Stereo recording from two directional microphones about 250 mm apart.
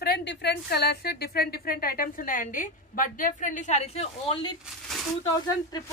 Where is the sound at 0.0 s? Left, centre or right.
Left.